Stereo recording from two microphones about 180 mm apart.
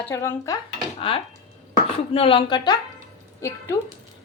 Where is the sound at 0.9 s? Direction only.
30° left (ahead or behind).